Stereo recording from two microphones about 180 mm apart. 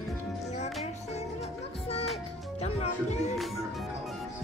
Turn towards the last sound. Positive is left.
turn(degrees=0)  # may be behind; listen again after turning